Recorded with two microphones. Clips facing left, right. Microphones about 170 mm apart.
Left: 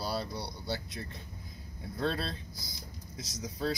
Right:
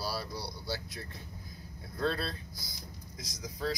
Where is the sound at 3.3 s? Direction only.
25° left (ahead or behind).